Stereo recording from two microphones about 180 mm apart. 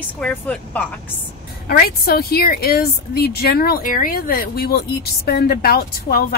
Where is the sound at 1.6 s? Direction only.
55° left (ahead or behind).